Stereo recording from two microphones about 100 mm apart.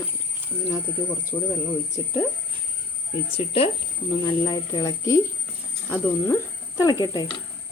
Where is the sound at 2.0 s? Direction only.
40° left (ahead or behind).